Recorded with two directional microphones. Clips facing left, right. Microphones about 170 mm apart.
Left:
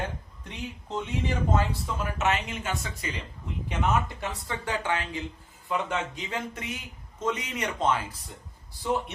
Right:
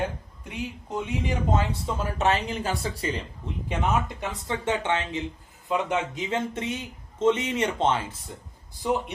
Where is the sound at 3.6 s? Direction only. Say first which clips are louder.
Right 1 dB; 20° right (ahead or behind).